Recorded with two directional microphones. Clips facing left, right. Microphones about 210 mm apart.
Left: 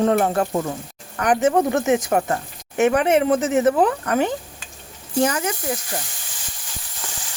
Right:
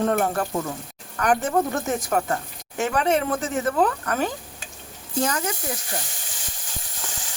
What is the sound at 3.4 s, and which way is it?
Speech, 75° left (ahead or behind).